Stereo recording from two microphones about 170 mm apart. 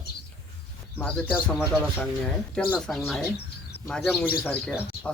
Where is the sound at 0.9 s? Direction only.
5° left (ahead or behind).